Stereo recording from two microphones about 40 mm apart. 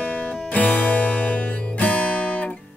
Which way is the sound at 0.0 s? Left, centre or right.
Left.